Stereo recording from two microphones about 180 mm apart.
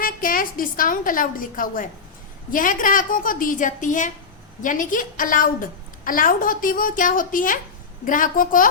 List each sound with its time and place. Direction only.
0.0 s a woman's voice: 50° left (ahead or behind)